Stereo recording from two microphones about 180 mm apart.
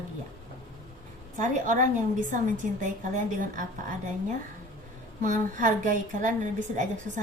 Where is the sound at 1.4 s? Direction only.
45° right (ahead or behind).